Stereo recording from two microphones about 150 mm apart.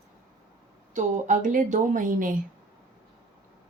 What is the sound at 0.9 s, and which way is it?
Speech, 55° right (ahead or behind).